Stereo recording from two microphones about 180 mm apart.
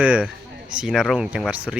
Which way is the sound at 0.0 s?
5° right (ahead or behind).